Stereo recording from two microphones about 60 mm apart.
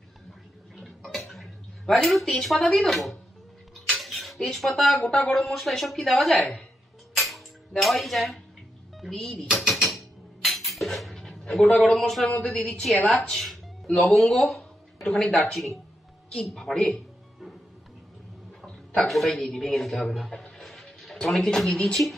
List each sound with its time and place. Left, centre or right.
0.7 s a sound: centre
2.3 s a woman's voice: centre
4.0 s dishes: centre
4.5 s a woman's voice: centre
7.2 s a sound: centre
9.0 s music: centre
12.3 s speech: centre
13.1 s a woman's voice: centre
13.8 s speech: centre
14.5 s a sound: centre
15.5 s a woman's voice: centre
18.9 s a woman's voice: centre
20.5 s a sound: centre